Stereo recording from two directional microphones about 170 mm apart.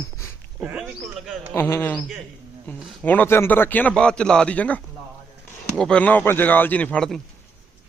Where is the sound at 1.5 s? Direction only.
15° left (ahead or behind).